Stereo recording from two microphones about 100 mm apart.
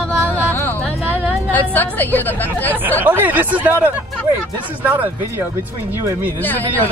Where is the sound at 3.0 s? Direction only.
20° right (ahead or behind).